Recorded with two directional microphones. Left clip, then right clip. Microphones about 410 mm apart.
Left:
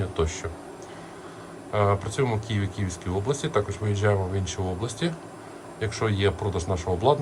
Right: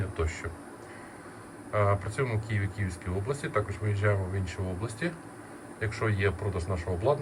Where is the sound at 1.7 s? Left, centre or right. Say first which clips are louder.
Left 4 dB; centre.